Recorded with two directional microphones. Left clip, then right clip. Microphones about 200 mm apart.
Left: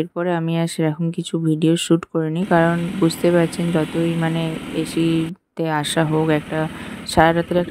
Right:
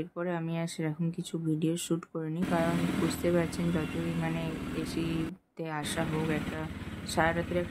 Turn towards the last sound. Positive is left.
turn(degrees=40)  # may be behind; listen again after turning